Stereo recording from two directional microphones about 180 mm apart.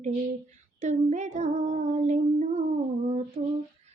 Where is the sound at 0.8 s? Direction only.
40° right (ahead or behind).